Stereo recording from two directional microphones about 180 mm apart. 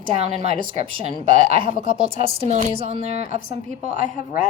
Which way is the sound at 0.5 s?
35° right (ahead or behind).